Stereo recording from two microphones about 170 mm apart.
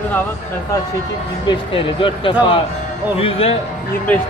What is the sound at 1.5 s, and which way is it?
Speech, 30° left (ahead or behind).